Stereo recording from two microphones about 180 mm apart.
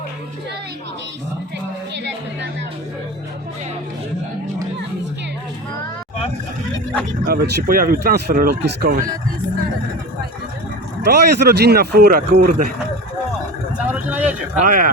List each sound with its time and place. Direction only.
7.3 s speech: 60° right (ahead or behind)
11.0 s speech: 65° right (ahead or behind)
13.7 s vehicle: 10° right (ahead or behind)
14.5 s speech: 45° right (ahead or behind)